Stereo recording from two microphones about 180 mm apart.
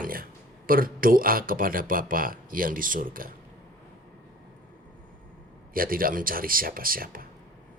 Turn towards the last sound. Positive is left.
turn(degrees=-50)  # may be behind; listen again after turning